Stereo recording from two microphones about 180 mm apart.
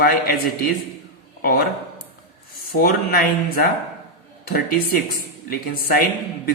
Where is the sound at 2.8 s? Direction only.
55° left (ahead or behind).